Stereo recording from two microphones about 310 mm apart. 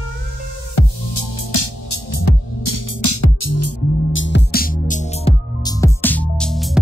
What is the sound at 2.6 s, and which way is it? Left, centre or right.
Music, left.